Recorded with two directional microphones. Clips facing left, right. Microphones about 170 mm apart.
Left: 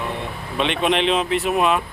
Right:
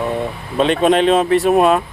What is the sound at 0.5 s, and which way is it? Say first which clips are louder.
Speech: right 7 dB; 40° right (ahead or behind).